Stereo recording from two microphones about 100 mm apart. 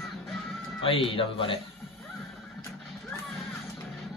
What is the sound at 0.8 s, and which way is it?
Speech, 65° left (ahead or behind).